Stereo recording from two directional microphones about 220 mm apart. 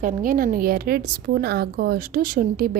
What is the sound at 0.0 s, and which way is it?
A woman's voice, 40° right (ahead or behind).